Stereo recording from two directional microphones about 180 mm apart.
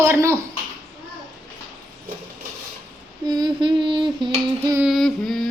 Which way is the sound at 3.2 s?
25° right (ahead or behind).